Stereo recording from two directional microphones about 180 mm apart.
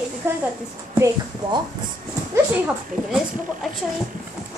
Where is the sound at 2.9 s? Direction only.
45° right (ahead or behind).